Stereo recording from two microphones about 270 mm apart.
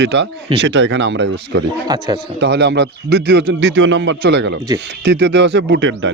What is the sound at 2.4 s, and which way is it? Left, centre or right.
Speech, right.